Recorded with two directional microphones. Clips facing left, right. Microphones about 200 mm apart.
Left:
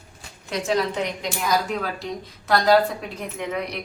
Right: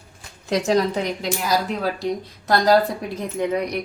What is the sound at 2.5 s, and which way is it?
Speech, 35° right (ahead or behind).